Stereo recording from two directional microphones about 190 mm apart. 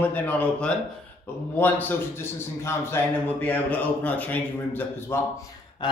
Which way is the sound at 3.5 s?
10° left (ahead or behind).